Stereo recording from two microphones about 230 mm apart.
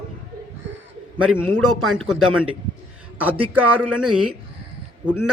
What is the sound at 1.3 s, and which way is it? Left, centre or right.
Speech, centre.